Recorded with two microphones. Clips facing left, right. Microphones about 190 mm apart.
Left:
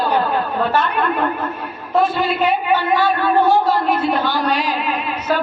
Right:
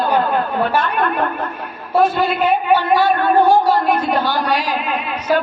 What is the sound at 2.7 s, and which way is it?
A man's voice, 10° right (ahead or behind).